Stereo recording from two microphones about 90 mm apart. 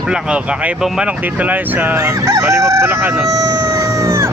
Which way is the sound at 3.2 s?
45° right (ahead or behind).